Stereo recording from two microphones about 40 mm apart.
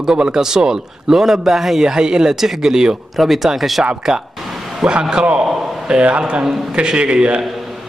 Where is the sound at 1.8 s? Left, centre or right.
Right.